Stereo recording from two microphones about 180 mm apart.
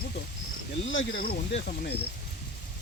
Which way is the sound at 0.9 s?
80° left.